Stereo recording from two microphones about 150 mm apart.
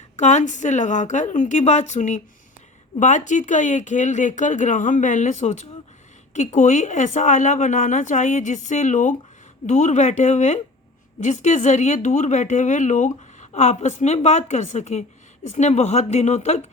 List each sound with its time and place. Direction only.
0.2 s speech: 50° left (ahead or behind)